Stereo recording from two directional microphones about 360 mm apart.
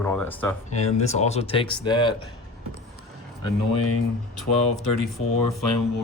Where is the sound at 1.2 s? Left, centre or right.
Centre.